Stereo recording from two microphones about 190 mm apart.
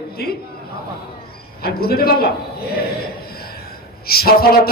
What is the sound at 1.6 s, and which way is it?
Speech, 55° left (ahead or behind).